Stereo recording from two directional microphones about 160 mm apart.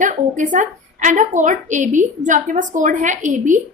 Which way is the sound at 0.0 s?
55° right (ahead or behind).